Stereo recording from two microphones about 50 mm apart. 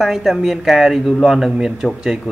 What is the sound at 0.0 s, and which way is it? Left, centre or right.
Speech, centre.